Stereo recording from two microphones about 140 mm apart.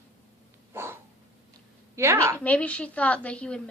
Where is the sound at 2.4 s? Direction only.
10° left (ahead or behind).